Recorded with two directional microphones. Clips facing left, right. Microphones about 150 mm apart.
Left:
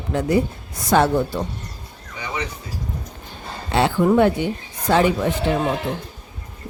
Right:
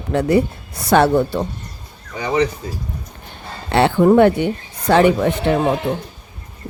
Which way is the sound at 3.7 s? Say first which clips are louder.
Right 4 dB; 65° right (ahead or behind).